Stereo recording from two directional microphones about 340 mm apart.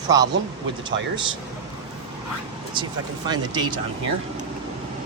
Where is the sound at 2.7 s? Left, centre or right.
Centre.